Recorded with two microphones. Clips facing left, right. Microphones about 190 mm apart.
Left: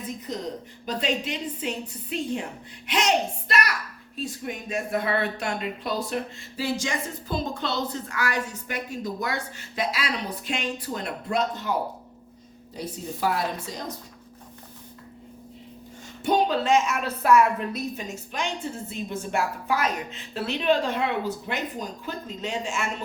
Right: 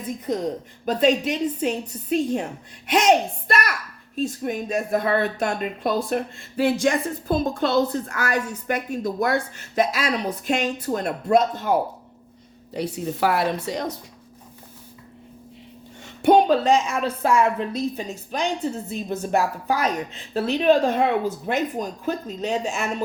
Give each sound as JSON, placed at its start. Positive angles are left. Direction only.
{"t": 0.9, "sound": "speech", "side_deg": -50}
{"t": 4.2, "sound": "speech", "side_deg": -45}
{"t": 12.7, "sound": "a woman's voice", "side_deg": -70}
{"t": 16.2, "sound": "speech", "side_deg": -60}
{"t": 16.6, "sound": "a woman's voice", "side_deg": -35}